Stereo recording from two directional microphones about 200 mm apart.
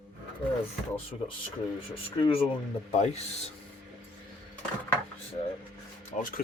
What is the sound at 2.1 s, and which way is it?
Speech, 25° left (ahead or behind).